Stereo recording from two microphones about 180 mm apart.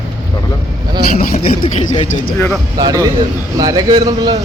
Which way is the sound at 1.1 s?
35° left (ahead or behind).